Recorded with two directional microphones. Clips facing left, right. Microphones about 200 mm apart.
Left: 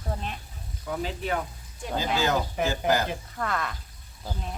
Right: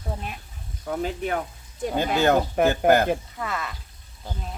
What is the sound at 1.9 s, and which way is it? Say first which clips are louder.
Speech: right 5 dB; 60° right (ahead or behind).